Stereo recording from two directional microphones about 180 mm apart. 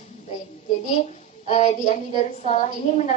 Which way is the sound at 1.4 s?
40° left (ahead or behind).